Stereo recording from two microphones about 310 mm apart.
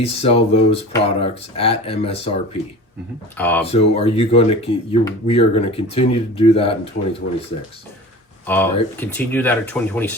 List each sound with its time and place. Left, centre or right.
0.0 s speech: centre
3.3 s speech: centre
3.7 s speech: centre
8.4 s speech: centre